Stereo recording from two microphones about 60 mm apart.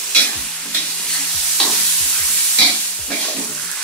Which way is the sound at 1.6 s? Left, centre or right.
Centre.